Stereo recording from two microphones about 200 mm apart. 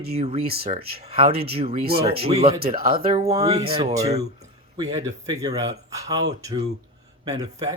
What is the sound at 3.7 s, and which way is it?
Speech, 30° right (ahead or behind).